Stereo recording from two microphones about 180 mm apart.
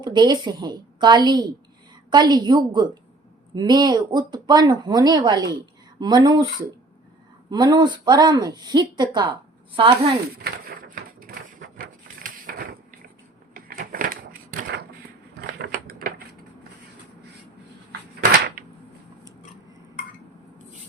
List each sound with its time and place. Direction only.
0.0 s speech: 25° right (ahead or behind)
7.5 s speech: 25° right (ahead or behind)
10.3 s pigeon: 55° right (ahead or behind)
11.8 s a sound: 50° right (ahead or behind)
13.7 s crushing: 50° right (ahead or behind)
15.4 s a sound: 55° right (ahead or behind)